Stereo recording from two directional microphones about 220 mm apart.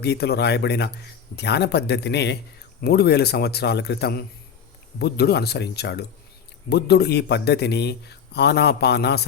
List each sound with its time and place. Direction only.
0.0 s a man's voice: 45° left (ahead or behind)